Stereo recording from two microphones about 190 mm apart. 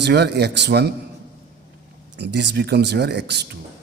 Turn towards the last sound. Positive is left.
turn(degrees=-60)  # may be behind; listen again after turning